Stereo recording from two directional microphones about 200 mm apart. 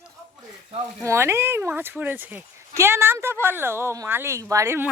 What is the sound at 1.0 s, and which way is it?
Speech, 15° right (ahead or behind).